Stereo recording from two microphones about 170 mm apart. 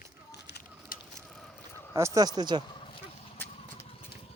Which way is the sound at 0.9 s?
55° left (ahead or behind).